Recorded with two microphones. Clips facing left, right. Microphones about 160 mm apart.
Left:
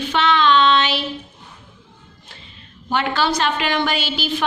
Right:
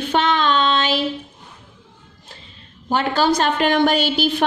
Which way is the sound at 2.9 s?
40° right (ahead or behind).